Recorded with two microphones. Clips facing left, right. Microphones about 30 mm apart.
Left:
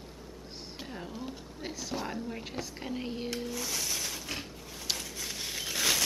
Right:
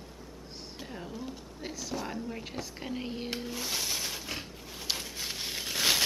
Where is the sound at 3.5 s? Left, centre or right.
Right.